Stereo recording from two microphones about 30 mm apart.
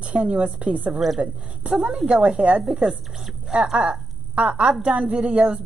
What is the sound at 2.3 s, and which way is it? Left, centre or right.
Speech, right.